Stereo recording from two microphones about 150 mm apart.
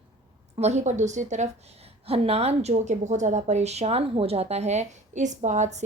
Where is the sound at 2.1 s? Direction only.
40° right (ahead or behind).